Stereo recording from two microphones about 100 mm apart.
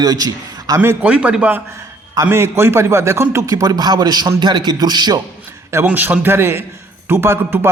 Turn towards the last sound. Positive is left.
turn(degrees=-20)  # may be behind; listen again after turning